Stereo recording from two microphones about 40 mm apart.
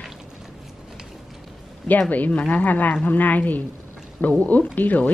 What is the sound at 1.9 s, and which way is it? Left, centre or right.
A woman's voice, left.